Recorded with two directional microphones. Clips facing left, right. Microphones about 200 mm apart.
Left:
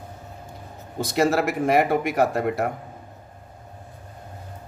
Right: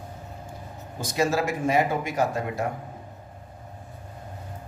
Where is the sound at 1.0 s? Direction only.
65° left (ahead or behind).